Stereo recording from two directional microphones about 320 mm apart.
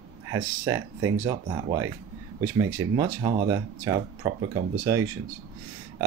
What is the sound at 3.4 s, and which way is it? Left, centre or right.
Speech, centre.